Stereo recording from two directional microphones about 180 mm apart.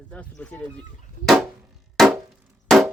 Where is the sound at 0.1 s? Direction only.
5° left (ahead or behind).